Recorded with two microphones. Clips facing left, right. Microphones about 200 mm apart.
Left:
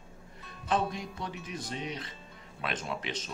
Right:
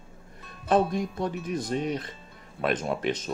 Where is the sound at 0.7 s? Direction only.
50° right (ahead or behind).